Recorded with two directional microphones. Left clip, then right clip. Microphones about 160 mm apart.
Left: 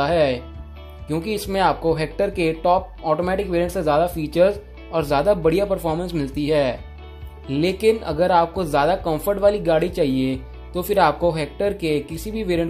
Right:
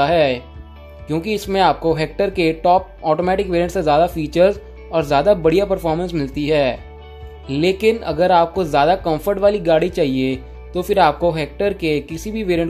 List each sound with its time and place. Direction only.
0.0 s speech: 25° right (ahead or behind)